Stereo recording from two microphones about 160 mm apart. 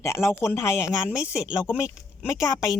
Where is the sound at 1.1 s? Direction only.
5° right (ahead or behind).